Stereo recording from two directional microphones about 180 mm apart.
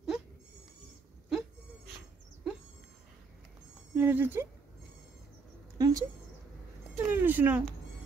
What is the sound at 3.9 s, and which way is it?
Speech, 10° right (ahead or behind).